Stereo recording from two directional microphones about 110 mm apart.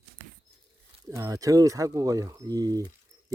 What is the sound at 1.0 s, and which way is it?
Speech, 30° right (ahead or behind).